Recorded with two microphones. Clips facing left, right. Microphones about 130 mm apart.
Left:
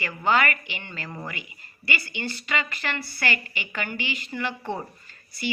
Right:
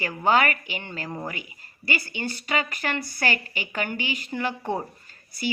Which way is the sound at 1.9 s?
40° right (ahead or behind).